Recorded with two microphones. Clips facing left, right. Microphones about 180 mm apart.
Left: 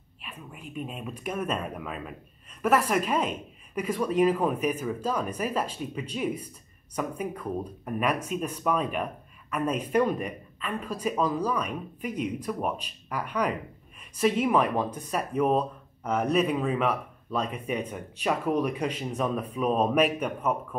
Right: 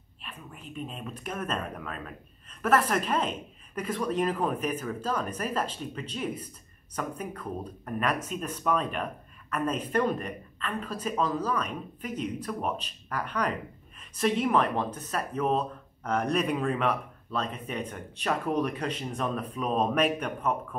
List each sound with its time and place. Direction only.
0.2 s speech: 10° left (ahead or behind)